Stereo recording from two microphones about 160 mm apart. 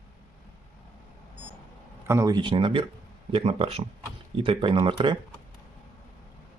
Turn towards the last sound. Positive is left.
turn(degrees=-30)  # may be behind; listen again after turning